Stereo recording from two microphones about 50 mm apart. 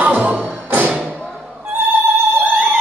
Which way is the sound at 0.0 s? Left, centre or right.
Right.